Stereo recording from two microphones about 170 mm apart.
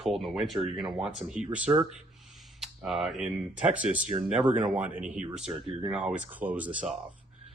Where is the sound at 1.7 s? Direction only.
20° right (ahead or behind).